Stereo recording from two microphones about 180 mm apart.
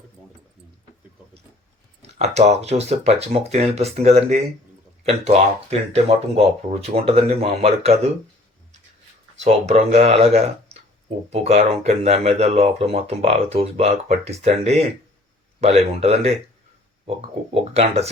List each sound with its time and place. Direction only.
2.0 s speech: 35° right (ahead or behind)
9.4 s speech: 35° right (ahead or behind)